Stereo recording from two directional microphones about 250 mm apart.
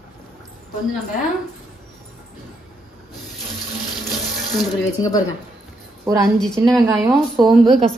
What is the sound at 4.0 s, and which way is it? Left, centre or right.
Sink, centre.